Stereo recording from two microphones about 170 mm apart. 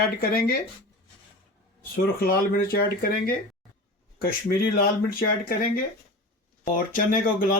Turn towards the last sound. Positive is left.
turn(degrees=55)  # may be behind; listen again after turning